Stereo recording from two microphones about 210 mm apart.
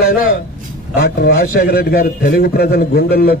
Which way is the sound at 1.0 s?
45° left (ahead or behind).